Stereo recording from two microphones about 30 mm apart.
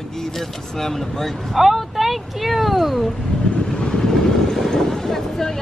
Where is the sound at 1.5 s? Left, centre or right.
Centre.